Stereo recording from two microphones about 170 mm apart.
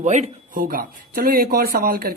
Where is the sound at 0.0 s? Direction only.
45° right (ahead or behind).